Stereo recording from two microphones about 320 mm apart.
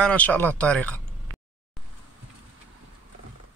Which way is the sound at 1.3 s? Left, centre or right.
Right.